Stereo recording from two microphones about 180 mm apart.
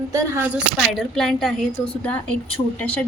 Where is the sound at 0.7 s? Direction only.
Centre (ahead or behind).